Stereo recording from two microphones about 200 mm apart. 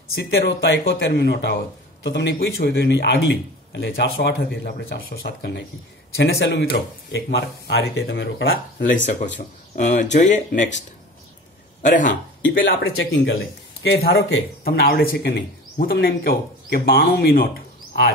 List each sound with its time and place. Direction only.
0.1 s speech: 55° left (ahead or behind)
9.8 s speech: 35° left (ahead or behind)
11.8 s speech: 40° left (ahead or behind)
12.4 s speech: 70° left (ahead or behind)
13.8 s speech: 55° left (ahead or behind)